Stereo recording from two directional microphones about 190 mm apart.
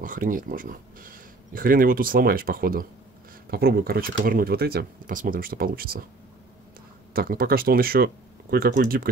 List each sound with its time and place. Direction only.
0.0 s speech: 45° right (ahead or behind)
7.2 s speech: 50° right (ahead or behind)